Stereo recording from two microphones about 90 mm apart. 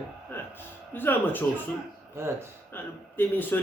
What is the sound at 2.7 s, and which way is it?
Speech, 20° left (ahead or behind).